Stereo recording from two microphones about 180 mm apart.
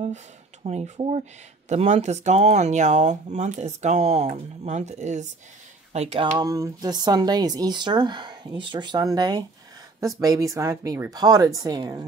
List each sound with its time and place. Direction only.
0.7 s speech: 35° right (ahead or behind)
6.3 s speech: 20° right (ahead or behind)